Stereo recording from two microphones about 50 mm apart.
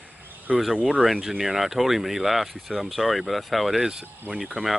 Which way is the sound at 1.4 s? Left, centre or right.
Centre.